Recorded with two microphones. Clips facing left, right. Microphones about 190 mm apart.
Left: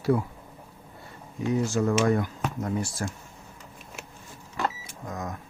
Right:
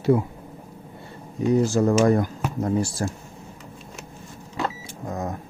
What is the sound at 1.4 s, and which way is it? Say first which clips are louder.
Speech: right 6 dB; 35° right (ahead or behind).